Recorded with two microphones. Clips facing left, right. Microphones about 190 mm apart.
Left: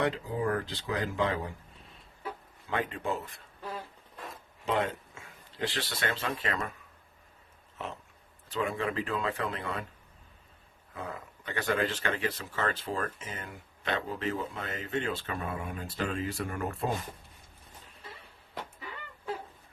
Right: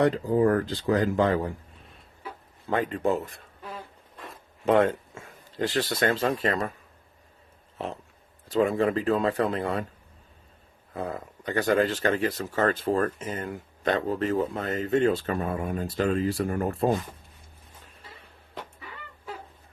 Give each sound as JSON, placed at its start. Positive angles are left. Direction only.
{"t": 0.0, "sound": "speech", "side_deg": -45}
{"t": 2.6, "sound": "speech", "side_deg": -40}
{"t": 4.6, "sound": "speech", "side_deg": -55}
{"t": 8.4, "sound": "speech", "side_deg": -40}
{"t": 10.9, "sound": "speech", "side_deg": -40}